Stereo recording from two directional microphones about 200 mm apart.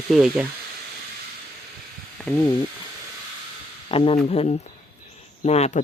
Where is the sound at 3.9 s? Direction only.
30° left (ahead or behind).